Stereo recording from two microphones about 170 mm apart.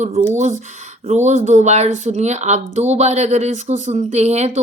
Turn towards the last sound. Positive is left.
turn(degrees=-40)  # may be behind; listen again after turning